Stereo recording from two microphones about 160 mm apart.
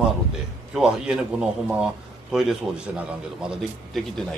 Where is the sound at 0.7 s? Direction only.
5° right (ahead or behind).